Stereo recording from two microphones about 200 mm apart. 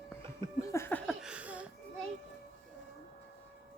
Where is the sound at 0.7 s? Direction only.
10° left (ahead or behind).